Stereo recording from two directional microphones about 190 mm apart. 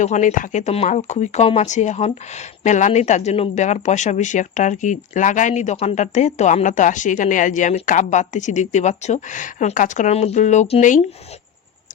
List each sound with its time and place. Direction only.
0.0 s speech: 40° left (ahead or behind)